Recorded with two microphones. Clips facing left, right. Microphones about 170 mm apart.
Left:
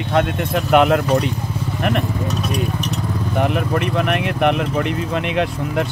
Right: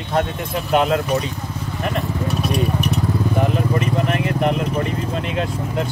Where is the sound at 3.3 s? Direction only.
65° left (ahead or behind).